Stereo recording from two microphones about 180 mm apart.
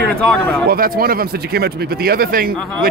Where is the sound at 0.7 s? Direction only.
55° right (ahead or behind).